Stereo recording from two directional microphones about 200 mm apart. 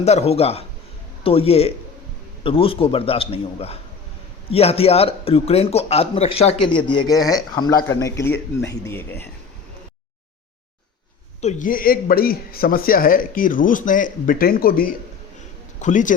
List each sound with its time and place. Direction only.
0.0 s a man's voice: 30° left (ahead or behind); by 9.3 s 10° left (ahead or behind)
11.3 s a man's voice: 40° left (ahead or behind)